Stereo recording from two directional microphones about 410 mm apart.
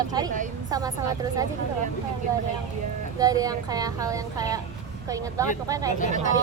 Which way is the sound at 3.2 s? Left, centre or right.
Centre.